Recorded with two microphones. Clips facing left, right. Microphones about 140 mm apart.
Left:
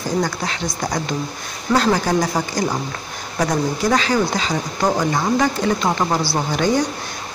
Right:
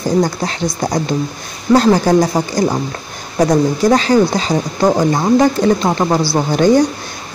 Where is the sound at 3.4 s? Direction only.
40° right (ahead or behind).